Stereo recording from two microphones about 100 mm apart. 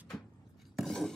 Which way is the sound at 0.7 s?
5° left (ahead or behind).